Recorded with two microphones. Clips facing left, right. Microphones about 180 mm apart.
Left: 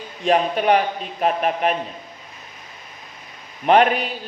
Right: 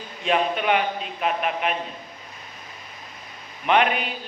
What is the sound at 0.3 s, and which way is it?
Speech, 40° left (ahead or behind).